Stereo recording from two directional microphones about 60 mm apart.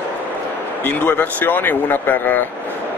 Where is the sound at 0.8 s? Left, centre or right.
Left.